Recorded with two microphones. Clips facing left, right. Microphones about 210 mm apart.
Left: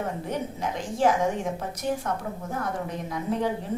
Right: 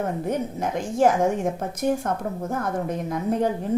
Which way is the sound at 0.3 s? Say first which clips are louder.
Right 4 dB; 45° right (ahead or behind).